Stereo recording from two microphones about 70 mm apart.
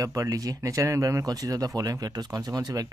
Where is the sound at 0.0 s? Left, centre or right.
Right.